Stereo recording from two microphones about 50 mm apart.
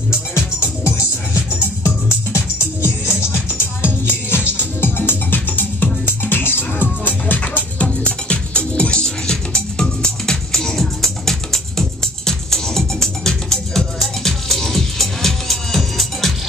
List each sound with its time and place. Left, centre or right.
0.3 s music: left
7.3 s music: left; by 16.3 s centre